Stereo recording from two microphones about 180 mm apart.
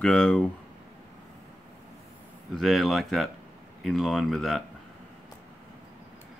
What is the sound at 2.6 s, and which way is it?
Speech, centre (ahead or behind).